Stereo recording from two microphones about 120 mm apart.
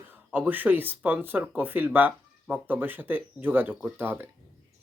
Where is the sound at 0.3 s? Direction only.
15° right (ahead or behind).